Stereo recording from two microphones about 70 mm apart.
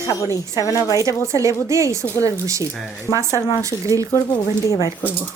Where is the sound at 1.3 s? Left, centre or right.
Right.